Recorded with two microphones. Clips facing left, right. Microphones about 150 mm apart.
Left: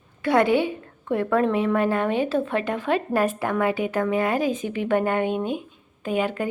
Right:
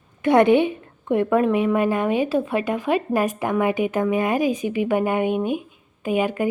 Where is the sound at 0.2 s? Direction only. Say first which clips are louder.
Right 4 dB; 20° right (ahead or behind).